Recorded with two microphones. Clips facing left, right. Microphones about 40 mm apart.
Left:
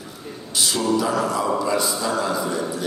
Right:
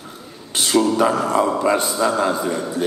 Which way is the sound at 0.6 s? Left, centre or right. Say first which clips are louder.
Right 7 dB; right.